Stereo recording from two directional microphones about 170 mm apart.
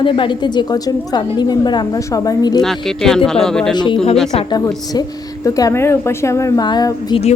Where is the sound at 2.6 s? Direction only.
Centre (ahead or behind).